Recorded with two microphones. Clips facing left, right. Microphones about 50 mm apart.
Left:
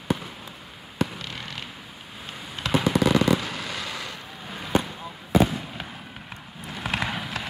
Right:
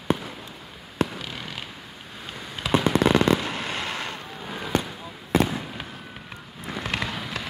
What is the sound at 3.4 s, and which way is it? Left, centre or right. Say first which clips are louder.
Fireworks: right 3 dB; right.